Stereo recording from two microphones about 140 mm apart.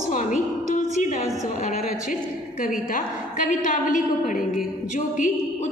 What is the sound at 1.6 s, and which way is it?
A woman's voice, 75° left (ahead or behind).